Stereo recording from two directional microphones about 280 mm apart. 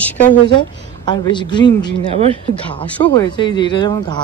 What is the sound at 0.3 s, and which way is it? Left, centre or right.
A woman's voice, centre.